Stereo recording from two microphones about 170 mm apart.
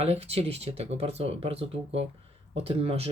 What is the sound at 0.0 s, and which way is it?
Speech, 35° right (ahead or behind).